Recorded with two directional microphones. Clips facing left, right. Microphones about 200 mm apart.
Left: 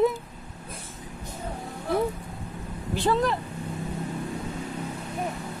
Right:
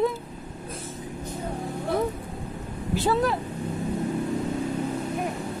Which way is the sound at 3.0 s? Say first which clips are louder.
Even; 5° right (ahead or behind).